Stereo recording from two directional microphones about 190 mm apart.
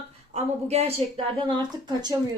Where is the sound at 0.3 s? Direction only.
35° right (ahead or behind).